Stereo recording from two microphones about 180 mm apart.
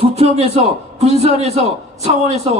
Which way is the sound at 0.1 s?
35° right (ahead or behind).